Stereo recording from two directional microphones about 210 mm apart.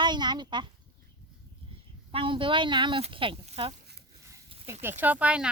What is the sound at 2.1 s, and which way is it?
Speech, 25° right (ahead or behind).